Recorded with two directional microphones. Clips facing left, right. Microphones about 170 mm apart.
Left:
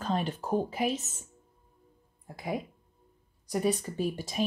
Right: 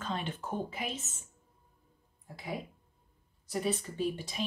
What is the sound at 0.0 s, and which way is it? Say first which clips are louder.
Speech: left 6 dB; 40° left (ahead or behind).